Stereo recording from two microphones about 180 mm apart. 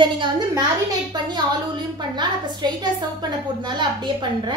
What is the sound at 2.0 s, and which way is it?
A woman's voice, 25° right (ahead or behind).